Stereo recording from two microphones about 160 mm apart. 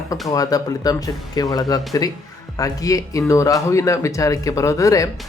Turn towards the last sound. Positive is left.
turn(degrees=20)  # may be behind; listen again after turning